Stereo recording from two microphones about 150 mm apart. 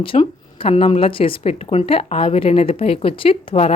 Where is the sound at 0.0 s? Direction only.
35° left (ahead or behind).